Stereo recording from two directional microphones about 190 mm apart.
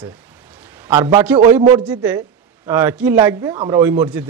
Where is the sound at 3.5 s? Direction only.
25° right (ahead or behind).